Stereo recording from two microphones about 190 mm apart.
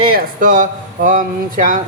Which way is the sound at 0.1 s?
45° right (ahead or behind).